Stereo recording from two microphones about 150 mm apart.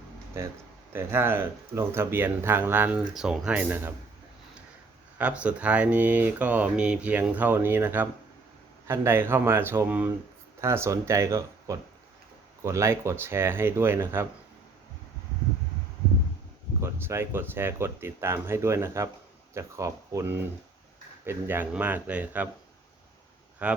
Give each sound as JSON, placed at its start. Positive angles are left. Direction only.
{"t": 0.4, "sound": "speech", "side_deg": -15}
{"t": 5.1, "sound": "speech", "side_deg": -10}
{"t": 16.8, "sound": "speech", "side_deg": -15}
{"t": 23.6, "sound": "speech", "side_deg": -10}